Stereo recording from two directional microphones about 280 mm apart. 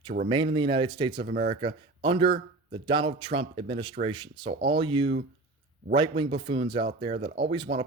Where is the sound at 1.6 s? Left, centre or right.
Centre.